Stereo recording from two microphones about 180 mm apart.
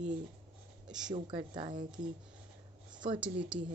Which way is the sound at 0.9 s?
5° right (ahead or behind).